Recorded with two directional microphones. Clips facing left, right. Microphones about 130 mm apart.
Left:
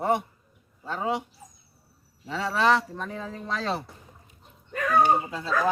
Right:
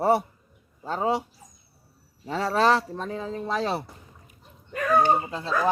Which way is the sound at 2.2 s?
40° right (ahead or behind).